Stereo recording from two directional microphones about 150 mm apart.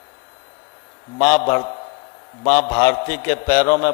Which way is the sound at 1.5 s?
25° left (ahead or behind).